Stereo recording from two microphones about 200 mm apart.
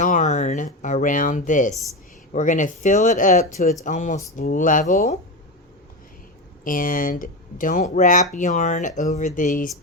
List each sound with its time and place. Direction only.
0.0 s speech: 35° left (ahead or behind)
6.7 s speech: 45° left (ahead or behind)